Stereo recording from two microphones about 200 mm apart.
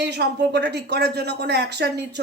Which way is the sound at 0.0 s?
55° right (ahead or behind).